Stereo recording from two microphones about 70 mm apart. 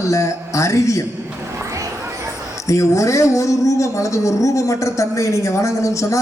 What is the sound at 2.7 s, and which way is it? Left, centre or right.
A woman's voice, left.